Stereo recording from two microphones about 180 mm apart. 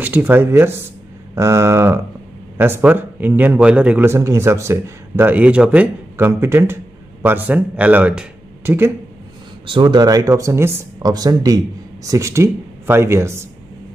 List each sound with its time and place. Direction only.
0.0 s a man's voice: 10° right (ahead or behind)
9.7 s a man's voice: 25° right (ahead or behind)